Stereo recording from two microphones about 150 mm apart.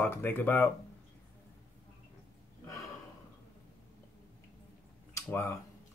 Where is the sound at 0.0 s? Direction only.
15° left (ahead or behind).